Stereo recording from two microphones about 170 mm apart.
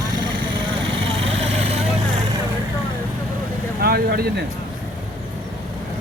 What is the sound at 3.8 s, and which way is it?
Speech, 65° right (ahead or behind).